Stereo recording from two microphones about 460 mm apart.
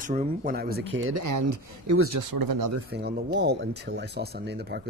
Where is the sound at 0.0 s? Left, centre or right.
Centre.